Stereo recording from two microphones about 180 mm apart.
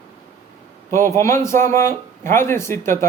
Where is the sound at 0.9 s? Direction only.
15° left (ahead or behind).